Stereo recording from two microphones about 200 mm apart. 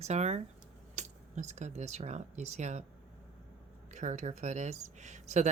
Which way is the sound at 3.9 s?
35° right (ahead or behind).